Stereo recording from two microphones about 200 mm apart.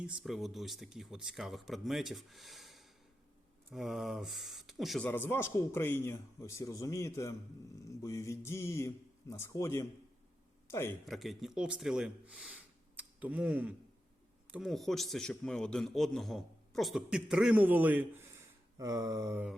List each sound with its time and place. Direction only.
0.2 s a man's voice: centre (ahead or behind)
11.0 s a man's voice: centre (ahead or behind)